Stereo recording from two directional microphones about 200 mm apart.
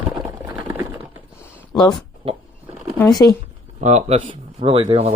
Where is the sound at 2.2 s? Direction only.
30° right (ahead or behind).